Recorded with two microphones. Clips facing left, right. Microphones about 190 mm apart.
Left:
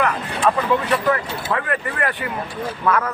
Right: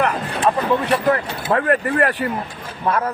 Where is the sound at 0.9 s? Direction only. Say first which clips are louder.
Right 2 dB; 35° right (ahead or behind).